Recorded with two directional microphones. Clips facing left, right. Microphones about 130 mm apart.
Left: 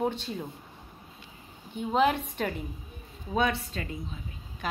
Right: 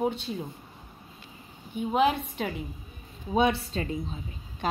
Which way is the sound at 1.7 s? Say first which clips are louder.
Right 1 dB; 5° right (ahead or behind).